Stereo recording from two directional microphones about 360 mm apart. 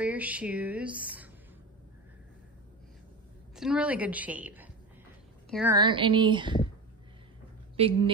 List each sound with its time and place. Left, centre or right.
0.0 s speech: centre
3.5 s a woman's voice: centre
7.7 s a woman's voice: centre